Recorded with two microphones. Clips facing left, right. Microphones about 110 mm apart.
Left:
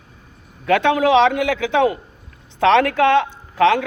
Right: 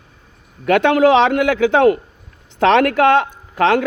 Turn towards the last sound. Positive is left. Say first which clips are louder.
# even
turn(degrees=-55)  # may be behind; listen again after turning